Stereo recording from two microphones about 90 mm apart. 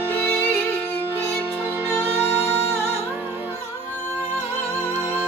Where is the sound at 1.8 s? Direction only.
25° right (ahead or behind).